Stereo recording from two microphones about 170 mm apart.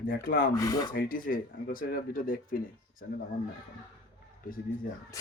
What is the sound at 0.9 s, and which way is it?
Speech, 55° left (ahead or behind).